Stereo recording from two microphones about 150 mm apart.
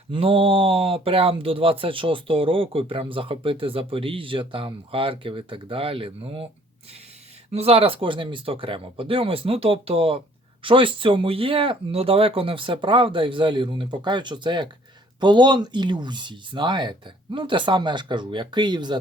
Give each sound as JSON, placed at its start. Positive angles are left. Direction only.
{"t": 0.1, "sound": "speech", "side_deg": -35}
{"t": 7.5, "sound": "speech", "side_deg": -40}